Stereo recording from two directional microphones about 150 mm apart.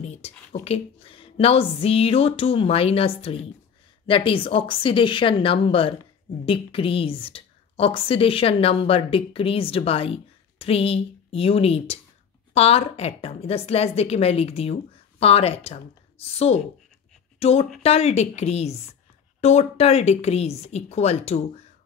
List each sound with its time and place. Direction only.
0.0 s a woman's voice: 45° left (ahead or behind)